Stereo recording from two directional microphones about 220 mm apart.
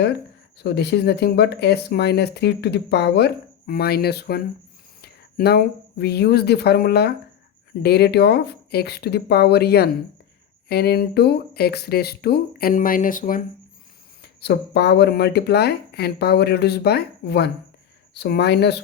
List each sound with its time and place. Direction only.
0.6 s speech: 50° left (ahead or behind)
14.2 s speech: 50° left (ahead or behind)